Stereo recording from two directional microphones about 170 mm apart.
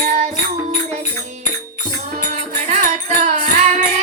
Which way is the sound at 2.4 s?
45° right (ahead or behind).